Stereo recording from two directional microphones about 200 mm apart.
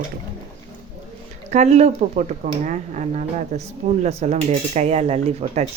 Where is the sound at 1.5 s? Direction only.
35° right (ahead or behind).